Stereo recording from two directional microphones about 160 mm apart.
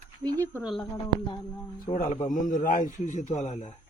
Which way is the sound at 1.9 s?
50° left (ahead or behind).